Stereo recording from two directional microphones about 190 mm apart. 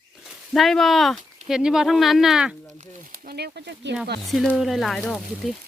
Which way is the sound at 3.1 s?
50° right (ahead or behind).